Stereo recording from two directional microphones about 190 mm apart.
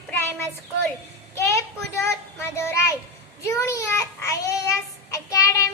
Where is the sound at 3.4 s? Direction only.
15° left (ahead or behind).